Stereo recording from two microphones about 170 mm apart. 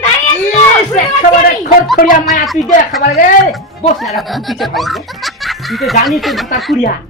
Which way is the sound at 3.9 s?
Centre (ahead or behind).